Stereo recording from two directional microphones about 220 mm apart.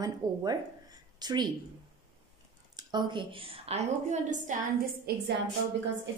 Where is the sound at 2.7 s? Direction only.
20° right (ahead or behind); by 4.6 s 35° right (ahead or behind).